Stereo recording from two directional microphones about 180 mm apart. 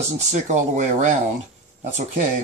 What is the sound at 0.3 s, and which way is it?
Speech, 40° right (ahead or behind).